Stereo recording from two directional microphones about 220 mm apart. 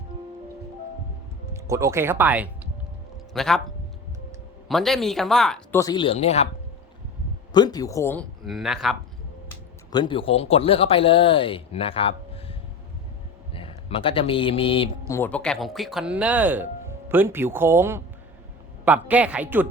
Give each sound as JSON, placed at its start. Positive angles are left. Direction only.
{"t": 1.5, "sound": "speech", "side_deg": -15}
{"t": 4.7, "sound": "speech", "side_deg": 0}
{"t": 5.8, "sound": "speech", "side_deg": 20}
{"t": 7.5, "sound": "speech", "side_deg": 20}
{"t": 9.5, "sound": "a man's voice", "side_deg": 20}
{"t": 15.1, "sound": "speech", "side_deg": 10}